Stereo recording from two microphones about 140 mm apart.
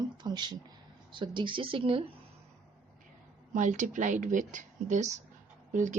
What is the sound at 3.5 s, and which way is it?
Speech, 65° right (ahead or behind).